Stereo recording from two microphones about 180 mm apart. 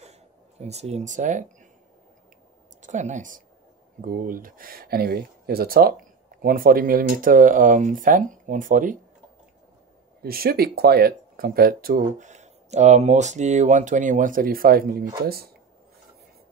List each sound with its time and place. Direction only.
0.0 s a sound: 35° right (ahead or behind)
2.8 s speech: 40° right (ahead or behind)
10.2 s speech: 55° right (ahead or behind)